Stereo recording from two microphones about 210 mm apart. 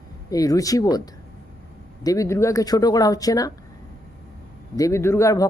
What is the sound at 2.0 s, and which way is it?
Speech, 15° left (ahead or behind).